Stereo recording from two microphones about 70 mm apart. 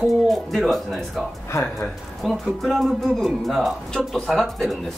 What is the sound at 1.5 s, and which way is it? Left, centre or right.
Speech, left.